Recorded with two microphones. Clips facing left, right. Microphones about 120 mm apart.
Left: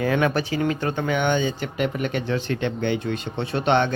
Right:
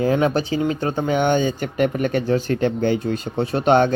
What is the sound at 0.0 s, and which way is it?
A man's voice, 30° right (ahead or behind).